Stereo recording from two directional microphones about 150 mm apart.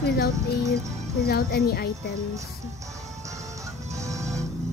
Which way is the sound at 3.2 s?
20° right (ahead or behind).